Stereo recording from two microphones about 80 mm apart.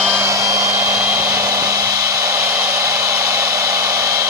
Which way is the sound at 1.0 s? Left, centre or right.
Right.